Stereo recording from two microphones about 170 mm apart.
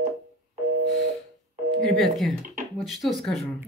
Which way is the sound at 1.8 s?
Centre (ahead or behind).